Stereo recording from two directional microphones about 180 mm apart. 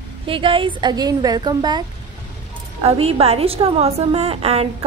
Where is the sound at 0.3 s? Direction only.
30° right (ahead or behind).